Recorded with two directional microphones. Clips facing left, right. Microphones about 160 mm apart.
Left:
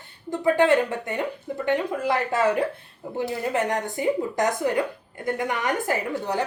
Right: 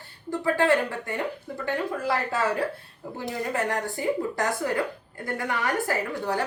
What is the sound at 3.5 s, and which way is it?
A woman's voice, 20° left (ahead or behind).